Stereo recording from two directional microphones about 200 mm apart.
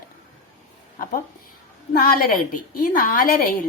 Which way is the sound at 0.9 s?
45° left (ahead or behind).